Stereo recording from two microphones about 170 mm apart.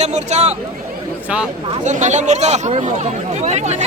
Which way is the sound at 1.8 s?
45° right (ahead or behind).